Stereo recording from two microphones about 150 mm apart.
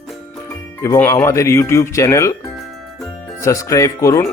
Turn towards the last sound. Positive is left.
turn(degrees=20)  # may be behind; listen again after turning